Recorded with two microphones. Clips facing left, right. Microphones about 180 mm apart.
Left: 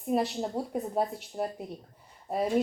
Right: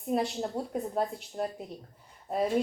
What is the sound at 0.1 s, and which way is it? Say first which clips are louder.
A woman's voice: left 1 dB; 5° left (ahead or behind).